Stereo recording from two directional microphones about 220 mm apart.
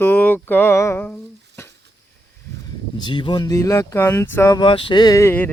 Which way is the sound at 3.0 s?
20° left (ahead or behind).